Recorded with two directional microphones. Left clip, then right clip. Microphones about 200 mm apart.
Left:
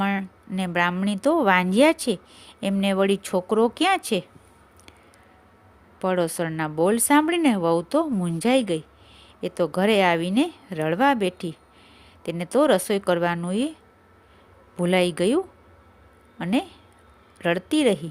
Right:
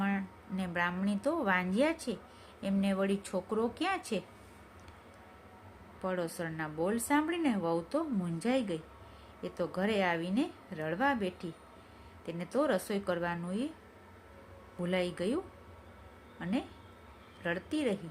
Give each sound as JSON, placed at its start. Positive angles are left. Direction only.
{"t": 0.0, "sound": "a woman's voice", "side_deg": 50}
{"t": 6.0, "sound": "a woman's voice", "side_deg": 50}
{"t": 14.8, "sound": "a woman's voice", "side_deg": 50}
{"t": 16.4, "sound": "a woman's voice", "side_deg": 50}